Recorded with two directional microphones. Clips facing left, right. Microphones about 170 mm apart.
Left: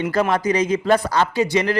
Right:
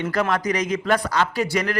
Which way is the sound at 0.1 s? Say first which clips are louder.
Left 3 dB; 25° left (ahead or behind).